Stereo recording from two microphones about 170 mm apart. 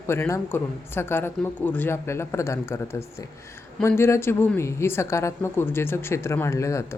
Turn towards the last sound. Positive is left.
turn(degrees=20)  # may be behind; listen again after turning